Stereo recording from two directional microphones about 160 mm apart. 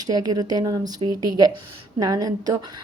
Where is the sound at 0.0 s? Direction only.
25° right (ahead or behind).